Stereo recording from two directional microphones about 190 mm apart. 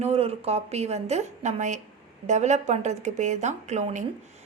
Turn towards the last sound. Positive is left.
turn(degrees=-40)  # may be behind; listen again after turning